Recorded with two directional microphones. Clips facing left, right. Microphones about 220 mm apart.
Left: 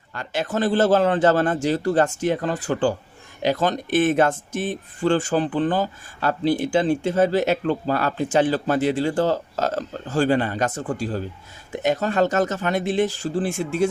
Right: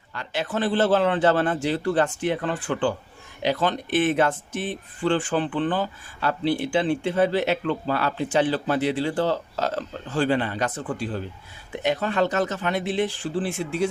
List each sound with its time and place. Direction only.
0.1 s speech: 45° left (ahead or behind)